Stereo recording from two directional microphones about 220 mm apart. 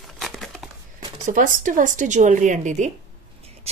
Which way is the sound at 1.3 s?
35° right (ahead or behind).